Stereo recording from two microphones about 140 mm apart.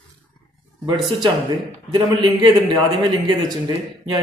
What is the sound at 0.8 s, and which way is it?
A man's voice, 35° right (ahead or behind).